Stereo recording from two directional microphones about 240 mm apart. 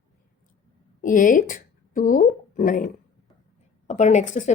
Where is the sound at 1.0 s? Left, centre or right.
Left.